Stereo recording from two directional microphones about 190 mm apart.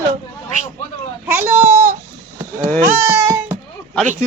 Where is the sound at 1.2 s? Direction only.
10° right (ahead or behind).